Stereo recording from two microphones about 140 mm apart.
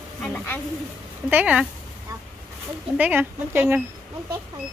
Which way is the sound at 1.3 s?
10° right (ahead or behind).